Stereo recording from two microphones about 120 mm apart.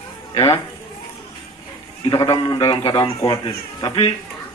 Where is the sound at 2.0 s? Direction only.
35° left (ahead or behind).